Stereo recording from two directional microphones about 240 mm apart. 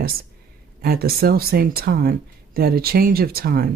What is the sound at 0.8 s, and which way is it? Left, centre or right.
Speech, right.